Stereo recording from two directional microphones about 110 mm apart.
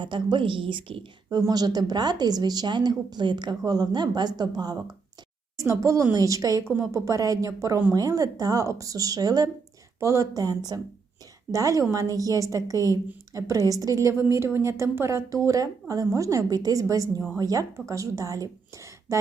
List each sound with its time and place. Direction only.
0.0 s a woman's voice: 45° right (ahead or behind)
1.4 s a woman's voice: 35° right (ahead or behind)